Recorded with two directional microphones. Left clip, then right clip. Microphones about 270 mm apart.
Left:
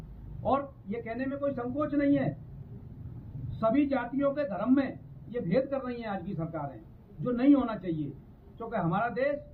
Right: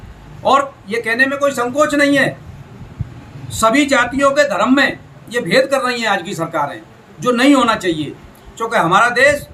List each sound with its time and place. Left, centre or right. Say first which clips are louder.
0.4 s a man's voice: right 16 dB; centre
3.6 s a man's voice: right 15 dB; centre